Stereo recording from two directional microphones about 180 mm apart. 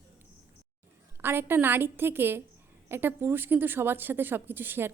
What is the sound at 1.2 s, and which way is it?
A woman's voice, 10° right (ahead or behind).